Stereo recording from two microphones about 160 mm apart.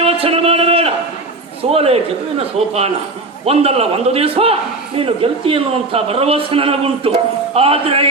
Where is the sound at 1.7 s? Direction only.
40° right (ahead or behind).